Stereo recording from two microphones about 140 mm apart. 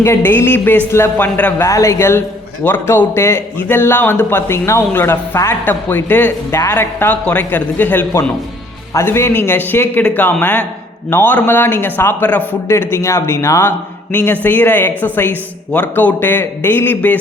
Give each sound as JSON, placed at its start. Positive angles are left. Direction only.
{"t": 0.0, "sound": "a man's voice", "side_deg": 15}